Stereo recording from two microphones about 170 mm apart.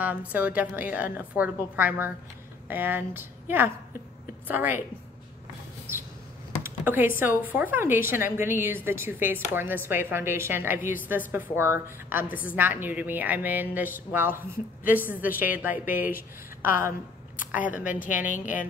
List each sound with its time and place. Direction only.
0.0 s speech: 10° right (ahead or behind)
6.6 s speech: 10° right (ahead or behind)
16.0 s speech: 55° left (ahead or behind)
17.8 s a woman's voice: 50° left (ahead or behind)